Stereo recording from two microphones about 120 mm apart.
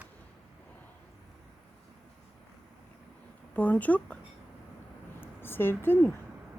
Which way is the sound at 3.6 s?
10° left (ahead or behind).